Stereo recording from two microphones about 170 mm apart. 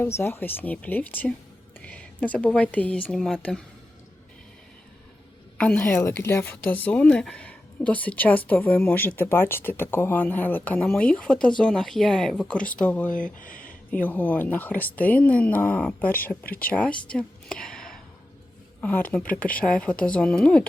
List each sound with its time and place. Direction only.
0.0 s speech: 15° left (ahead or behind)
5.5 s speech: 10° left (ahead or behind)
13.4 s speech: 55° left (ahead or behind)
14.0 s speech: 10° left (ahead or behind)